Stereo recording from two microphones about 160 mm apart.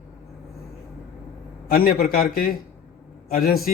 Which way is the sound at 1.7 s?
70° left (ahead or behind).